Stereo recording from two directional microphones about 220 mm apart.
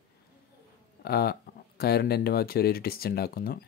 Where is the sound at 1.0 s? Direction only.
45° left (ahead or behind).